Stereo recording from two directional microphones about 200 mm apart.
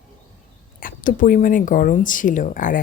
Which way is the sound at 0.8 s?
45° left (ahead or behind).